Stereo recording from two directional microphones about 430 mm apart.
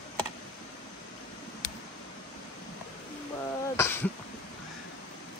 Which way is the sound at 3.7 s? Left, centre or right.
Centre.